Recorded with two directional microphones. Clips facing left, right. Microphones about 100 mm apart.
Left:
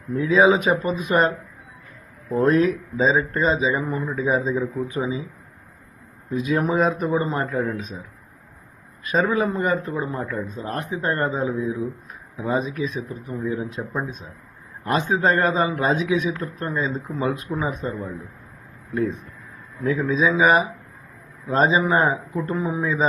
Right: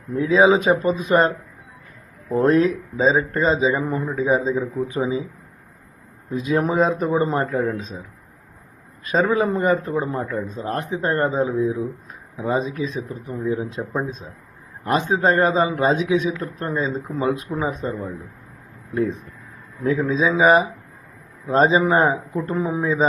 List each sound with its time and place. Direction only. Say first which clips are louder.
0.2 s a man's voice: right 1 dB; 30° right (ahead or behind)
2.3 s a man's voice: right 1 dB; 30° right (ahead or behind)
6.3 s a man's voice: right 1 dB; 30° right (ahead or behind)
9.0 s a man's voice: right 2 dB; 30° right (ahead or behind)
14.8 s a man's voice: right 1 dB; 25° right (ahead or behind)
19.8 s a man's voice: right 1 dB; 30° right (ahead or behind)